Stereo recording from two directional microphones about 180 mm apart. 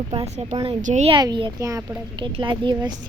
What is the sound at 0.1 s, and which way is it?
Speech, 35° right (ahead or behind).